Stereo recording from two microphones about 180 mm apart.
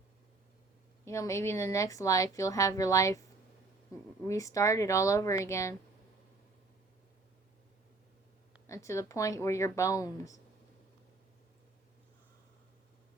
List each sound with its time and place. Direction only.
1.0 s speech: 15° left (ahead or behind)
8.6 s speech: 15° left (ahead or behind)